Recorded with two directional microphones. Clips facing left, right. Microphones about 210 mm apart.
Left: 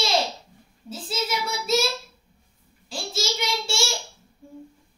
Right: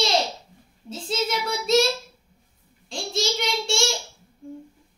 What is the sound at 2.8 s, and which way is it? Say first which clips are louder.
Child singing: right 3 dB; 5° left (ahead or behind).